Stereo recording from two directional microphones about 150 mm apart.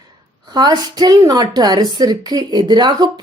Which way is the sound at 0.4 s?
25° right (ahead or behind).